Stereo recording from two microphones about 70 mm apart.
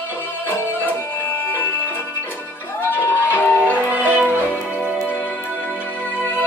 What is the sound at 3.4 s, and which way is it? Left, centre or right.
Music, left.